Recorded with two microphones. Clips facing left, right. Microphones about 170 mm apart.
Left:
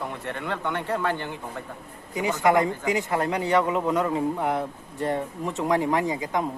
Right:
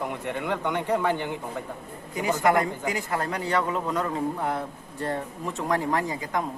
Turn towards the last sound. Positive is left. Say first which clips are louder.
# left 2 dB
turn(degrees=20)  # may be behind; listen again after turning